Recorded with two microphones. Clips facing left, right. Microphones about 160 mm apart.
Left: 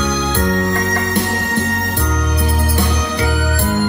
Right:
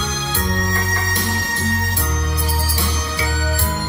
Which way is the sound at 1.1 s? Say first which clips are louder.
Left 7 dB; 60° left (ahead or behind).